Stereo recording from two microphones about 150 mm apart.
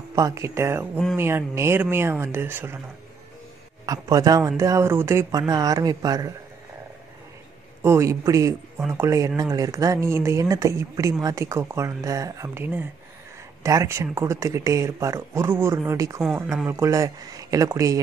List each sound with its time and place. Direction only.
0.1 s speech: 20° right (ahead or behind)
3.8 s speech: 25° right (ahead or behind)
7.8 s speech: 20° right (ahead or behind)